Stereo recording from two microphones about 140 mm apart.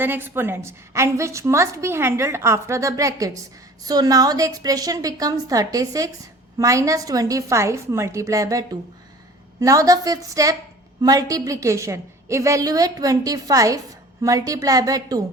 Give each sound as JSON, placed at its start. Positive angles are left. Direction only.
{"t": 0.0, "sound": "a woman's voice", "side_deg": -15}